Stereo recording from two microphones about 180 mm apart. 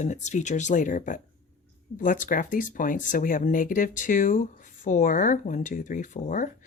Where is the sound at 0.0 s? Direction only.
40° left (ahead or behind).